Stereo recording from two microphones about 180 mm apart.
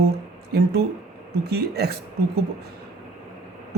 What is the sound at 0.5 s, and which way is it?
Speech, 65° right (ahead or behind).